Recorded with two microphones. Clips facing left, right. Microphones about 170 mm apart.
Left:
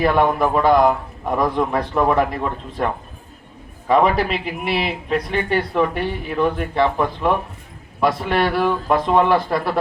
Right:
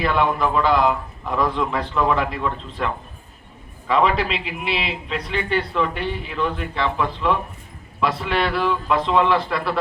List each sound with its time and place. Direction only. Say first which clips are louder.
0.0 s a man's voice: left 4 dB; 50° left (ahead or behind)